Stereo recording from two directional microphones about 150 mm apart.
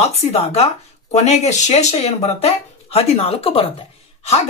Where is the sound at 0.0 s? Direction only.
45° left (ahead or behind).